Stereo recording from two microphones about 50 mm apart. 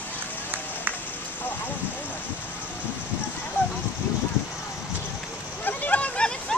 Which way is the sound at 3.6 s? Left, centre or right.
Left.